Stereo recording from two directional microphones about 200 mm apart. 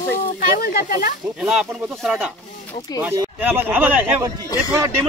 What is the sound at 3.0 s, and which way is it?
Speech, 10° right (ahead or behind).